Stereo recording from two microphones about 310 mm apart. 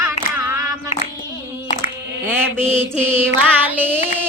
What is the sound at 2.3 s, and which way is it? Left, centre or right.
Mantra, centre.